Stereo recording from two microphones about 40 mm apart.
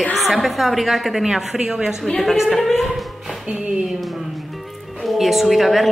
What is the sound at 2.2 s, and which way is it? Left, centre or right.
Speech, centre.